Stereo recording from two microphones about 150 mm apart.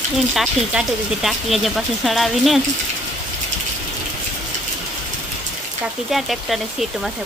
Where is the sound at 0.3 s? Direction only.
5° right (ahead or behind).